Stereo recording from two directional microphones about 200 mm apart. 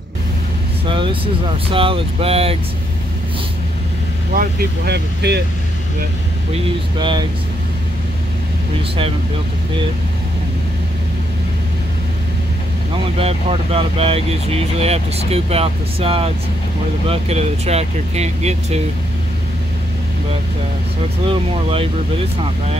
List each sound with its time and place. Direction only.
0.8 s speech: 25° right (ahead or behind)
4.4 s speech: 55° right (ahead or behind)
7.0 s speech: 25° right (ahead or behind)
13.2 s speech: 30° right (ahead or behind)
21.3 s speech: 30° right (ahead or behind)